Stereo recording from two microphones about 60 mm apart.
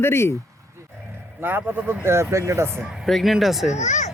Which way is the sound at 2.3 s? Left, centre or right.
Right.